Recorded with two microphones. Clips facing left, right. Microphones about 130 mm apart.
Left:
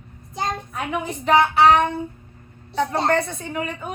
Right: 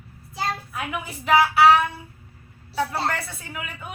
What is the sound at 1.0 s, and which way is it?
Music, 5° right (ahead or behind).